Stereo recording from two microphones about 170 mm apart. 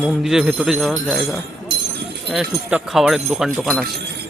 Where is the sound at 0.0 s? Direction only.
Centre (ahead or behind).